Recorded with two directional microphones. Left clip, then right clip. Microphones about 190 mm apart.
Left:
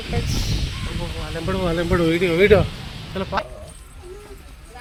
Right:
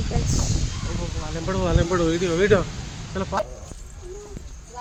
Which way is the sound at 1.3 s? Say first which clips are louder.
Left 1 dB; 55° left (ahead or behind).